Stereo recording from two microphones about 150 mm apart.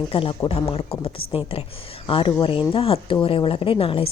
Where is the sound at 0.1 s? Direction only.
35° left (ahead or behind).